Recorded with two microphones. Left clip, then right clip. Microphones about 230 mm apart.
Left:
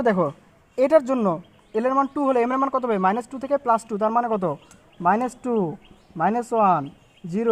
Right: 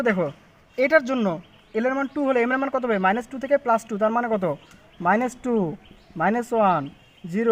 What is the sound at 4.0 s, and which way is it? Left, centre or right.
Speech, left.